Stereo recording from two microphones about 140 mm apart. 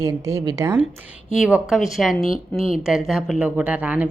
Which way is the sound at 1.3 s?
5° right (ahead or behind).